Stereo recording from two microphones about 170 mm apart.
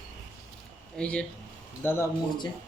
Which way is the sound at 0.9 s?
5° left (ahead or behind).